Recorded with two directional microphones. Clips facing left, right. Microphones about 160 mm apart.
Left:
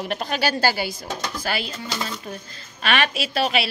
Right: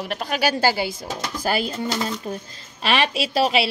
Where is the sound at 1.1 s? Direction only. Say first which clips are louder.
Right 3 dB; 45° right (ahead or behind).